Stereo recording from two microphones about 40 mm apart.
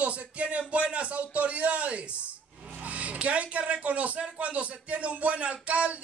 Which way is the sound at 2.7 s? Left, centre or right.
Right.